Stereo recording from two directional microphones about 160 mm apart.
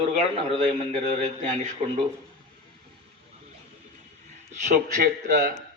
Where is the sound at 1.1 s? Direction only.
45° right (ahead or behind).